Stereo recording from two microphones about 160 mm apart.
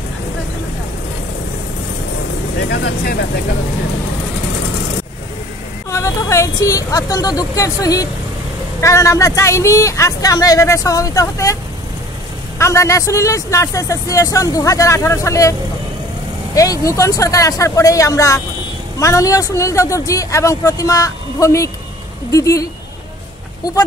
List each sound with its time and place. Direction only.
2.7 s speech: 90° left
5.9 s speech: 20° left (ahead or behind)
12.5 s speech: 20° left (ahead or behind)
16.5 s speech: 20° left (ahead or behind)